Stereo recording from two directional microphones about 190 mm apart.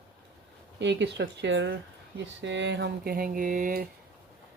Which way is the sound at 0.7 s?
65° right (ahead or behind).